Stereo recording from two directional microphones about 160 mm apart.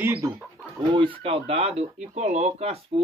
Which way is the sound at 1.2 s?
35° right (ahead or behind).